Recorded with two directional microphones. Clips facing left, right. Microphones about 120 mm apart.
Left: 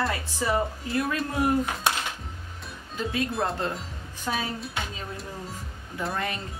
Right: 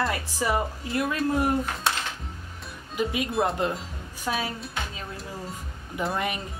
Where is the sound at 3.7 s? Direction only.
Centre (ahead or behind).